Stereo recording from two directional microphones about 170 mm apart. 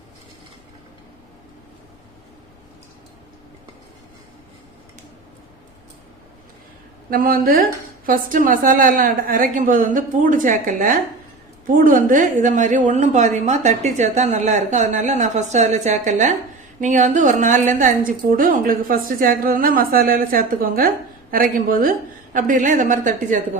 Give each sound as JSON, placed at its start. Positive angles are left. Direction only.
{"t": 7.1, "sound": "a woman's voice", "side_deg": -60}